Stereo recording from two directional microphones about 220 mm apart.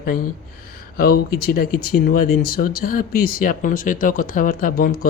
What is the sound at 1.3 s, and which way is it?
Speech, 45° left (ahead or behind).